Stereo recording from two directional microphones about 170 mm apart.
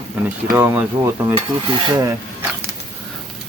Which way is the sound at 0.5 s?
15° right (ahead or behind).